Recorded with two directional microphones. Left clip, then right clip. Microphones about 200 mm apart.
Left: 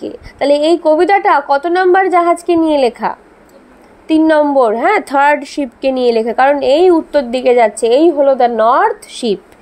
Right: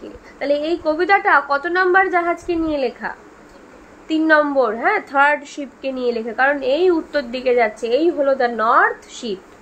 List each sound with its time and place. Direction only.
0.0 s a woman's voice: 35° left (ahead or behind)